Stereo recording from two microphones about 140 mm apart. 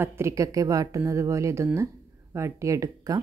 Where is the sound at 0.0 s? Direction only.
20° right (ahead or behind).